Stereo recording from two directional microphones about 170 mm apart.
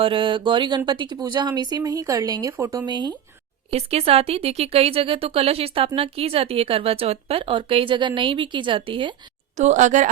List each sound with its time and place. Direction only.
0.0 s speech: 30° right (ahead or behind)
3.7 s speech: 35° right (ahead or behind)
9.6 s speech: 45° right (ahead or behind)